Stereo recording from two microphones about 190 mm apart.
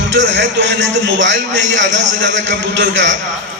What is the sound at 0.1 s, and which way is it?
A man's voice, 70° right (ahead or behind).